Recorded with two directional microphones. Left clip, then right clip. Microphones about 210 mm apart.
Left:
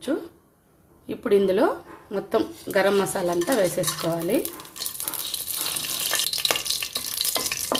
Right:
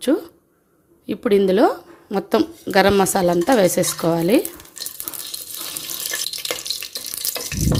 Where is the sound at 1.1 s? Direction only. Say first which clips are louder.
Right 4 dB; 40° right (ahead or behind).